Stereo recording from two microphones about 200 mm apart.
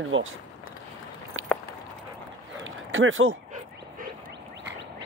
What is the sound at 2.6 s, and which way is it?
Dog, 75° right (ahead or behind).